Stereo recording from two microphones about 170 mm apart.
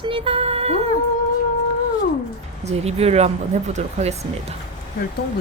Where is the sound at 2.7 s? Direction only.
40° right (ahead or behind).